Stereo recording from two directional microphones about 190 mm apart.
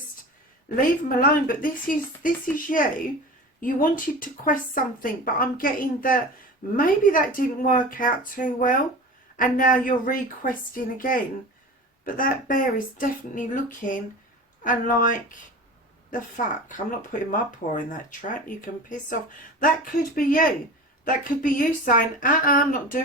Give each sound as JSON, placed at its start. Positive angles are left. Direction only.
{"t": 0.8, "sound": "speech", "side_deg": 45}